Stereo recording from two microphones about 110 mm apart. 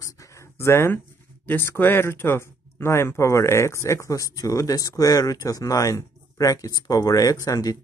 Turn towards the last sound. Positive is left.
turn(degrees=35)  # may be behind; listen again after turning